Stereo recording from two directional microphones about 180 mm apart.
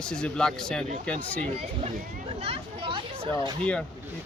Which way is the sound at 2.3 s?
35° right (ahead or behind).